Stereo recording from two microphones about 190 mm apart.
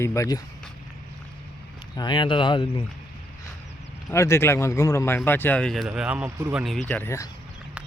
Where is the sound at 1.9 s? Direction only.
25° left (ahead or behind).